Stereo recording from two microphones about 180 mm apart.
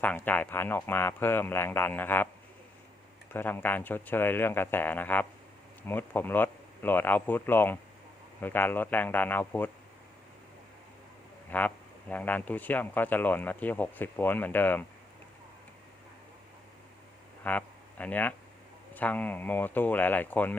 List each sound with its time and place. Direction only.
0.0 s speech: 10° left (ahead or behind)
3.3 s speech: 10° left (ahead or behind)
11.5 s speech: 10° left (ahead or behind)
17.4 s speech: 10° left (ahead or behind)